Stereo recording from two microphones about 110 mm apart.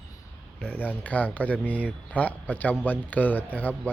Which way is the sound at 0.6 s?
15° left (ahead or behind).